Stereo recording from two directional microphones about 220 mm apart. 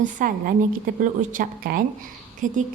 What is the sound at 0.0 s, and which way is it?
A woman's voice, 40° right (ahead or behind).